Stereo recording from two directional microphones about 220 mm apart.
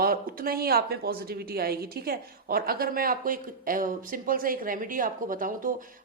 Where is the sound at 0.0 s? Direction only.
40° right (ahead or behind).